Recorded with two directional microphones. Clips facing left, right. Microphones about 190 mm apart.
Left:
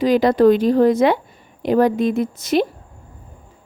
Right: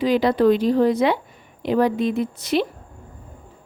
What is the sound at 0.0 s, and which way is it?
Speech, 45° left (ahead or behind).